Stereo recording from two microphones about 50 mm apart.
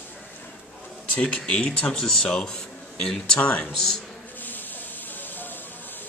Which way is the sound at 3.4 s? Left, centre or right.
Left.